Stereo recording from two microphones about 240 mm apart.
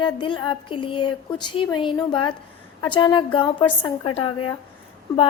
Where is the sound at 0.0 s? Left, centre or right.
Centre.